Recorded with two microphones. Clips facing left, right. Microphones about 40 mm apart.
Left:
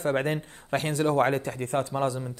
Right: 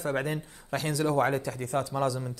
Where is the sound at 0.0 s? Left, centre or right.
Left.